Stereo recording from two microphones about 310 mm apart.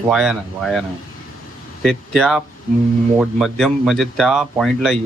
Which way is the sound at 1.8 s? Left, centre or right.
Centre.